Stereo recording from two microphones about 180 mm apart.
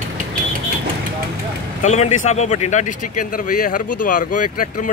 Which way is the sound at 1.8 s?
40° left (ahead or behind).